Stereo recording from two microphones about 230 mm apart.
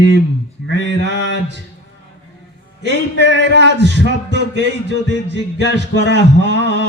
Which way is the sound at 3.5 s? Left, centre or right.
Right.